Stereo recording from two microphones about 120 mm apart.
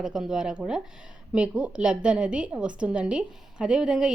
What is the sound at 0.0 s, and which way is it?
A woman's voice, 5° right (ahead or behind).